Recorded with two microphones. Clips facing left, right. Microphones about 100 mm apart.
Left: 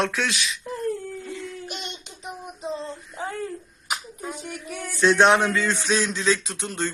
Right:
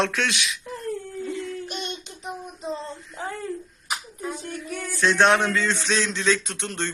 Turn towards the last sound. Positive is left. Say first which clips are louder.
# left 1 dB
turn(degrees=5)  # may be behind; listen again after turning